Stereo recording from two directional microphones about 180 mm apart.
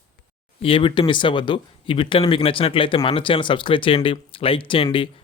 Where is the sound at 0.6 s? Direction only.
30° left (ahead or behind).